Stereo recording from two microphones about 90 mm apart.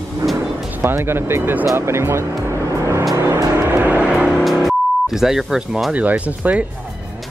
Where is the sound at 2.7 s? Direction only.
35° right (ahead or behind).